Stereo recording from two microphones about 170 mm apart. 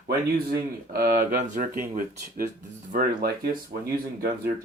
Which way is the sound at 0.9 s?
60° right (ahead or behind).